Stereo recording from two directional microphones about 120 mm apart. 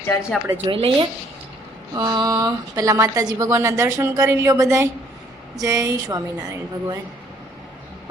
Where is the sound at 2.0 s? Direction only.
35° right (ahead or behind).